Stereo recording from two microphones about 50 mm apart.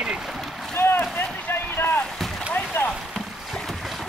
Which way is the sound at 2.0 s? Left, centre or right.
Centre.